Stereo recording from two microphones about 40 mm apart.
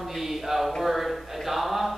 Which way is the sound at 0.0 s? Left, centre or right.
Centre.